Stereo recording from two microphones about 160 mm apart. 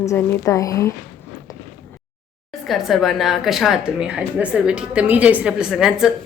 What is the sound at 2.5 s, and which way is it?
A woman's voice, centre (ahead or behind).